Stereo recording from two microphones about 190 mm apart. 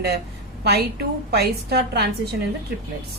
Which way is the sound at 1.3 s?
60° right (ahead or behind).